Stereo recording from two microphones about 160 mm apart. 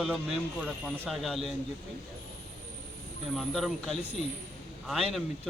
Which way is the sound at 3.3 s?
Centre (ahead or behind).